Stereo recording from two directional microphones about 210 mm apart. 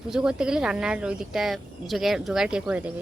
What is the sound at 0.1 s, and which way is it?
Speech, 5° right (ahead or behind).